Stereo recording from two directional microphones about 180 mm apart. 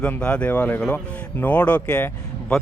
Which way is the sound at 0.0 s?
5° left (ahead or behind).